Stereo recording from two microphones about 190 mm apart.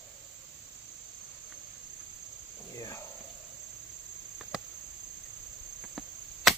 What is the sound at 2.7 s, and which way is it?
Insect, 15° left (ahead or behind).